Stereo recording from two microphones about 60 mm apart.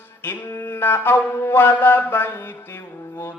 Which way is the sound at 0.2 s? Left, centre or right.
Left.